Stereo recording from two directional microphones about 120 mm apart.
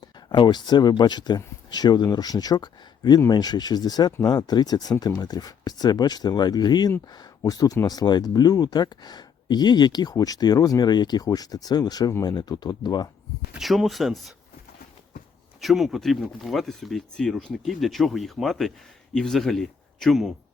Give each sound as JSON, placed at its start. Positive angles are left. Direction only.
{"t": 0.3, "sound": "speech", "side_deg": 40}
{"t": 13.5, "sound": "speech", "side_deg": 0}
{"t": 15.6, "sound": "speech", "side_deg": 0}